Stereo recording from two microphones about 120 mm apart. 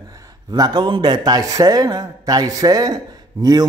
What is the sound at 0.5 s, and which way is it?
A man's voice, 35° right (ahead or behind).